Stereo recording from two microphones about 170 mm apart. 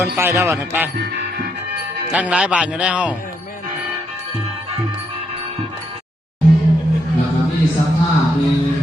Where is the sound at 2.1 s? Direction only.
5° right (ahead or behind).